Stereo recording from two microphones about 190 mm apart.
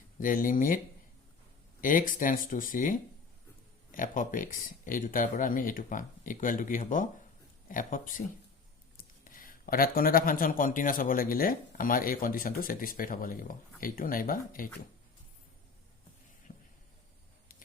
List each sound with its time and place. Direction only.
0.2 s speech: 45° left (ahead or behind)
1.8 s speech: 45° left (ahead or behind)
16.5 s a sound: 40° left (ahead or behind)